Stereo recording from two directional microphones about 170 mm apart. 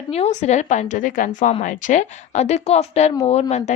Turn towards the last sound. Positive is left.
turn(degrees=40)  # may be behind; listen again after turning